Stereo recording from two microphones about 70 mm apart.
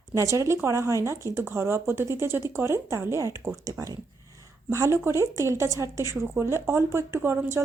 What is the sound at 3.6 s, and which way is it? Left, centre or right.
Speech, right.